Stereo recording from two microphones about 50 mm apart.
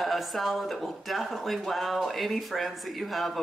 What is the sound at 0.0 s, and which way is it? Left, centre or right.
Speech, centre.